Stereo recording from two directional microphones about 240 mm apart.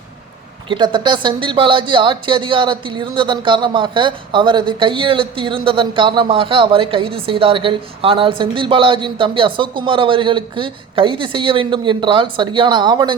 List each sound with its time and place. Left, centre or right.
0.7 s a woman's voice: centre